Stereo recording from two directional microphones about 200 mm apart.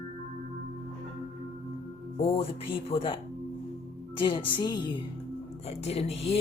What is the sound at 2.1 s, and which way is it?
Speech, 30° left (ahead or behind).